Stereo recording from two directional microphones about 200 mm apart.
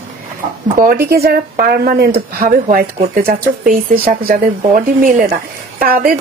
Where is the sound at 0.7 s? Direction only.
45° right (ahead or behind).